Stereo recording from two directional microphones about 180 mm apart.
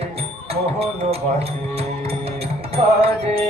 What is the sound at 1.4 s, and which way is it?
Music, 35° right (ahead or behind).